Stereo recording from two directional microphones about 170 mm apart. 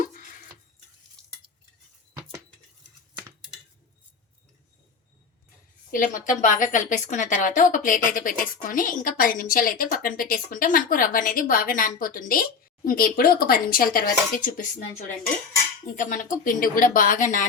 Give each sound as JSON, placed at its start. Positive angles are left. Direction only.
{"t": 0.0, "sound": "a sound", "side_deg": 50}
{"t": 5.9, "sound": "a woman's voice", "side_deg": 50}
{"t": 16.0, "sound": "a woman's voice", "side_deg": 50}